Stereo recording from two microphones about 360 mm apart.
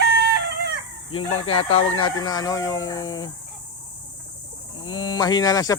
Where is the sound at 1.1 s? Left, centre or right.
Centre.